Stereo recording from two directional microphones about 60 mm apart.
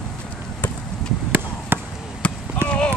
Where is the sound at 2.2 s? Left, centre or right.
Centre.